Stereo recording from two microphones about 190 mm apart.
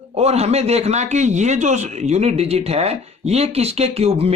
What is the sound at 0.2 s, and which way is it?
A man's voice, 35° right (ahead or behind).